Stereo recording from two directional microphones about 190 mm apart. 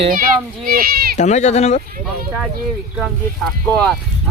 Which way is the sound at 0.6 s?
50° right (ahead or behind).